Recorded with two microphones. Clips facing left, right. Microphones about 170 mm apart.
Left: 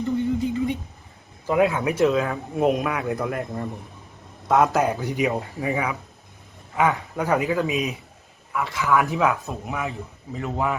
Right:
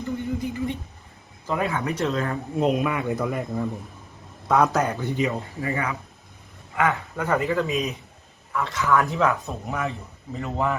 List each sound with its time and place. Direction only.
0.2 s a sound: 20° left (ahead or behind)
1.5 s speech: 5° left (ahead or behind)
4.9 s speech: 15° left (ahead or behind)